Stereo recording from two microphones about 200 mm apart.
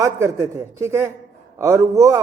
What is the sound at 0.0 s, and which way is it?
A man's voice, 15° right (ahead or behind).